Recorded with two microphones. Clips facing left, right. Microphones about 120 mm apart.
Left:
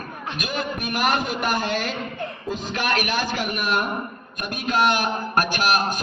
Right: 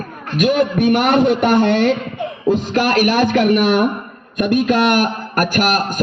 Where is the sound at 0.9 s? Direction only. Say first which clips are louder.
Right 7 dB; 65° right (ahead or behind).